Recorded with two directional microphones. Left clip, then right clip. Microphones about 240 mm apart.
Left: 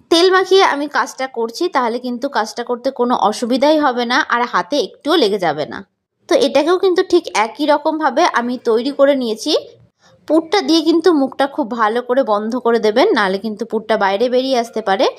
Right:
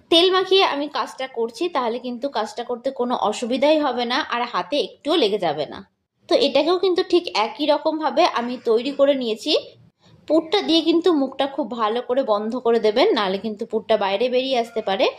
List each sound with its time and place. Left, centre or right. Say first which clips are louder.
0.1 s a woman's voice: left 5 dB; left